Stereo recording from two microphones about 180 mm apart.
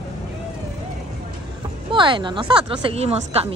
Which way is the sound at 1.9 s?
25° right (ahead or behind).